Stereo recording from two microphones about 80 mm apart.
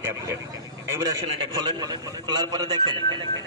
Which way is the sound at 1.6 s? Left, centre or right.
Right.